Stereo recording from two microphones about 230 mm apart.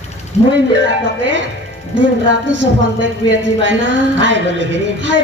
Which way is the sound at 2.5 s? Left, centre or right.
Right.